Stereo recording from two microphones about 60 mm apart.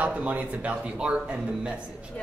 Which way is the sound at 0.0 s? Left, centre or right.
Right.